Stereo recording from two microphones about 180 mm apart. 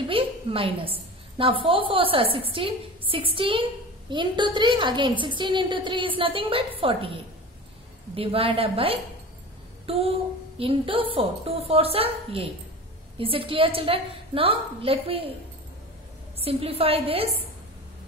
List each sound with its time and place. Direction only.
0.1 s a woman's voice: 30° right (ahead or behind)
9.8 s a sound: 35° right (ahead or behind)
10.6 s a woman's voice: 30° right (ahead or behind)
16.3 s a woman's voice: 35° right (ahead or behind)